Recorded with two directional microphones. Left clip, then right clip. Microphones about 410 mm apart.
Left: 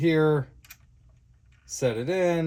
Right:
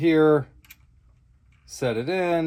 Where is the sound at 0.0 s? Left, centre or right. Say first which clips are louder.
Right 4 dB; centre.